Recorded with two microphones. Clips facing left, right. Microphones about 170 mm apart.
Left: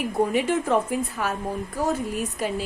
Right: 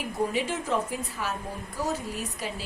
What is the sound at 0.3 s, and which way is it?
Speech, 55° left (ahead or behind).